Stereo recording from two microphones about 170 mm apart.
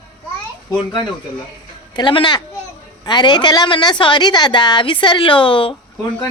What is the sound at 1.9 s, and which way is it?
A woman's voice, 25° left (ahead or behind).